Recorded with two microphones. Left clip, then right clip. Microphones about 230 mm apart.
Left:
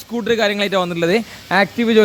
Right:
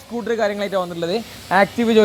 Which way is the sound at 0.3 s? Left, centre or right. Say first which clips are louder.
Left 4 dB; left.